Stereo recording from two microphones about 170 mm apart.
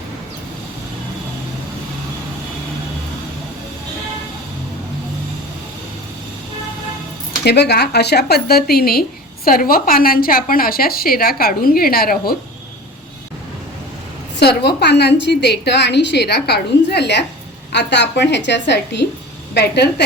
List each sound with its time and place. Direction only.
7.4 s speech: 80° left; by 12.4 s 60° left (ahead or behind)
14.3 s a woman's voice: 80° left
19.5 s a woman's voice: 75° left (ahead or behind)